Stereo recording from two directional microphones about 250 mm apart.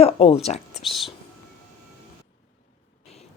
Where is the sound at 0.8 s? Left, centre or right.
Centre.